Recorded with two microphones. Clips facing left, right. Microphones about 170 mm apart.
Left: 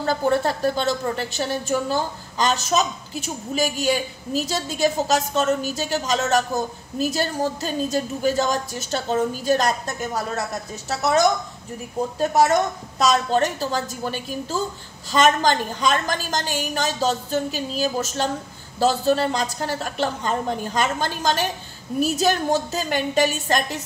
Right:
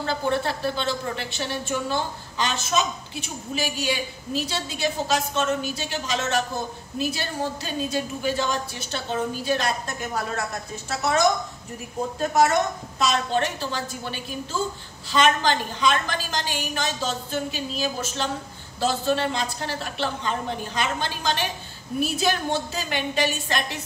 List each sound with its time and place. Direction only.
0.0 s a woman's voice: 40° left (ahead or behind)
13.0 s a woman's voice: 40° left (ahead or behind)